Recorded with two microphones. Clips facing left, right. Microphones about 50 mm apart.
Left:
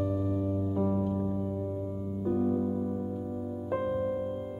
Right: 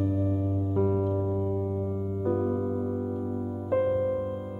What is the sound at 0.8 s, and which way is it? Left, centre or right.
Music, right.